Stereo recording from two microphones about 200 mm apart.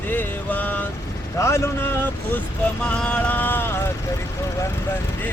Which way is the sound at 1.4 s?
15° left (ahead or behind).